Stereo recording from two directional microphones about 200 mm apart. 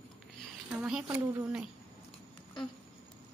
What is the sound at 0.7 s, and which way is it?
A woman's voice, 5° right (ahead or behind).